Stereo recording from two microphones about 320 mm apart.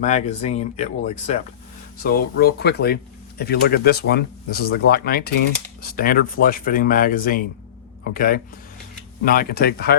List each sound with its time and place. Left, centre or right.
0.0 s speech: left